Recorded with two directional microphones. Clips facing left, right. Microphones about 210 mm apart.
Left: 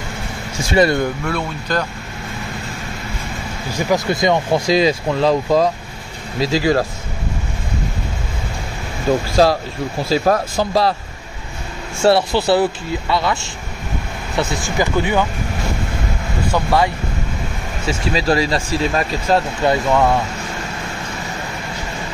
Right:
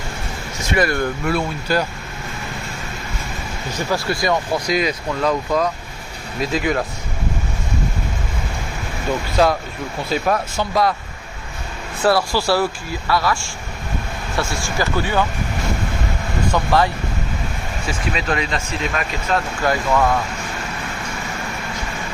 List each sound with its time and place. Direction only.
0.6 s speech: 30° left (ahead or behind)
1.2 s speech: 5° right (ahead or behind)
3.7 s speech: 20° left (ahead or behind)
9.1 s speech: 40° left (ahead or behind)
12.0 s speech: 25° left (ahead or behind)
16.4 s speech: 10° left (ahead or behind)
17.8 s speech: 30° left (ahead or behind)